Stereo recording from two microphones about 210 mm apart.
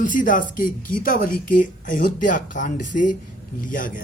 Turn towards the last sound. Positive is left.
turn(degrees=40)  # may be behind; listen again after turning